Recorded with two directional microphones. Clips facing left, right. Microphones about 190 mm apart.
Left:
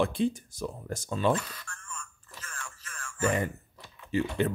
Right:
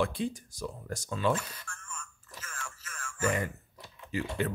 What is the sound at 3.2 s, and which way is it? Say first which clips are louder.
Speech: left 3 dB; 25° left (ahead or behind).